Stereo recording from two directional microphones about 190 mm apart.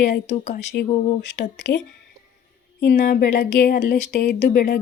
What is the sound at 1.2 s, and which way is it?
Speech, 65° left (ahead or behind).